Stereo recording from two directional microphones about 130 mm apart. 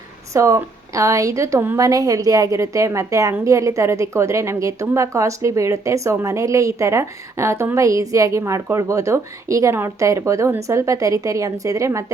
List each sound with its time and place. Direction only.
0.3 s a woman's voice: 25° right (ahead or behind)